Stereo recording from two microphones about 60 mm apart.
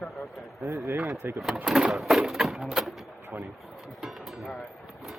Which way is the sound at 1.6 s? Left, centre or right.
Centre.